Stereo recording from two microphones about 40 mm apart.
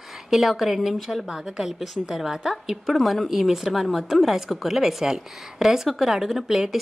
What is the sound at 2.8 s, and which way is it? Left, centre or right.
Speech, centre.